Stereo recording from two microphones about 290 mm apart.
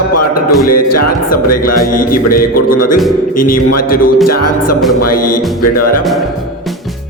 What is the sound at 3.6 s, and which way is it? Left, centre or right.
Music, left.